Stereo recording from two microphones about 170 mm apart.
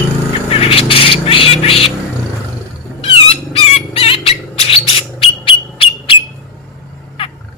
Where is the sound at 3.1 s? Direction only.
35° left (ahead or behind).